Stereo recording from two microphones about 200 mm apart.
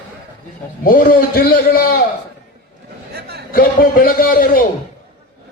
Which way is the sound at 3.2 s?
50° right (ahead or behind).